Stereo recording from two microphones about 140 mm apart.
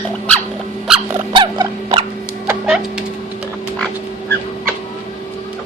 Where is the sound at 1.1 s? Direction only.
35° right (ahead or behind).